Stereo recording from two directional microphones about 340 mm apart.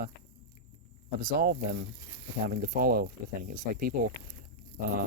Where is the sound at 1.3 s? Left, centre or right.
Right.